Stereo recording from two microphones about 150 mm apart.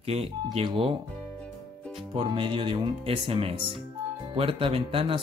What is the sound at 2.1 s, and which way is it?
Speech, 35° right (ahead or behind).